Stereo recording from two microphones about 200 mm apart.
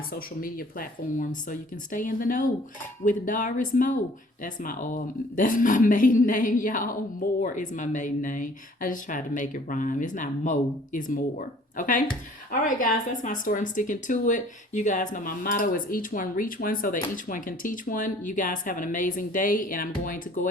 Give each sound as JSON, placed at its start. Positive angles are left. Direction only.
{"t": 0.1, "sound": "speech", "side_deg": 45}